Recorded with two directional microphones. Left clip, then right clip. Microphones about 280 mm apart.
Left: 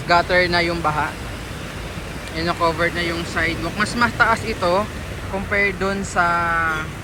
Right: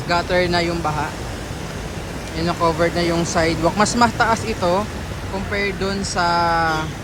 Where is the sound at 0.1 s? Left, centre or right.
Centre.